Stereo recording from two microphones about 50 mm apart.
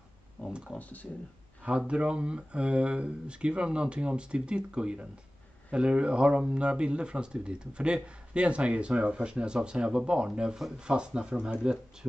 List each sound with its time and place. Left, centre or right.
0.5 s speech: centre
0.7 s speech: left
1.6 s speech: right